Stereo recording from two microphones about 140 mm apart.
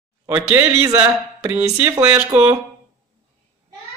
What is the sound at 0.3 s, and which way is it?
Speech, 15° right (ahead or behind).